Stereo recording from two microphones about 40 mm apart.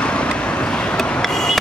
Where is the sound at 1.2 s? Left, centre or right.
Centre.